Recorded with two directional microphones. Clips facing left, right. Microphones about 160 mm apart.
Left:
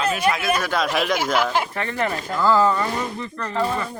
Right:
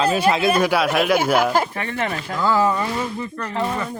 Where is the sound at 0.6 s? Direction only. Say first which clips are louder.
Right 4 dB; 5° right (ahead or behind).